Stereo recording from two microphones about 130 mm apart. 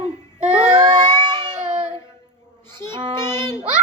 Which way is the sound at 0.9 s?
30° right (ahead or behind).